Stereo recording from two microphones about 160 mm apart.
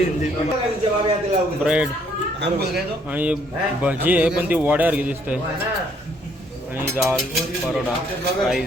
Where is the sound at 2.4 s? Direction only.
80° right.